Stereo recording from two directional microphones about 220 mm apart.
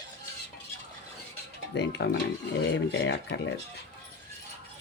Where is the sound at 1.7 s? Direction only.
50° left (ahead or behind).